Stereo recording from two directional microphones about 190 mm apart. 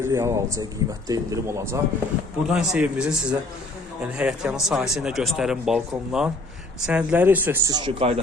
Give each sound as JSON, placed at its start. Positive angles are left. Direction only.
{"t": 0.0, "sound": "a man's voice", "side_deg": -15}